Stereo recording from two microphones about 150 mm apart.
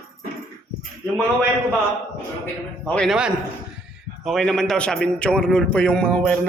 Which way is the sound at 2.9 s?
5° left (ahead or behind).